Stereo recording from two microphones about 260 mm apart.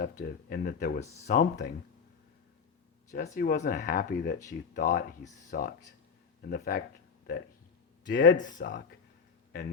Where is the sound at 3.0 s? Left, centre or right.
Left.